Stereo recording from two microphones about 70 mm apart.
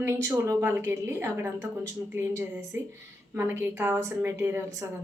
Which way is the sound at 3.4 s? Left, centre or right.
Right.